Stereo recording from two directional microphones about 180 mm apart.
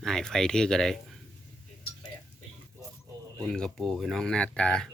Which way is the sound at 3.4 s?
5° left (ahead or behind).